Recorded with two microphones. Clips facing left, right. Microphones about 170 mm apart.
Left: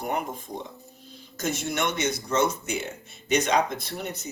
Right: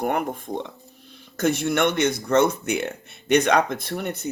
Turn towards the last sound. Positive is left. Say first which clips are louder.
# right 6 dB
turn(degrees=-60)  # may be behind; listen again after turning